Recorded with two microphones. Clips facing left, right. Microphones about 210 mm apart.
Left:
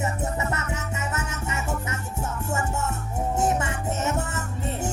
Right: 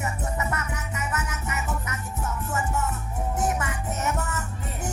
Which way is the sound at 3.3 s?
25° left (ahead or behind).